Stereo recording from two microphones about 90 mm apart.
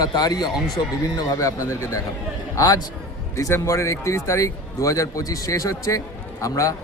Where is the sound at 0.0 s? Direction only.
50° left (ahead or behind).